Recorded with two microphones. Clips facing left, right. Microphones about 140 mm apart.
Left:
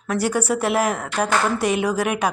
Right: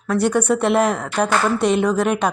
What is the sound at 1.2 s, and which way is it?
Speech, 35° right (ahead or behind).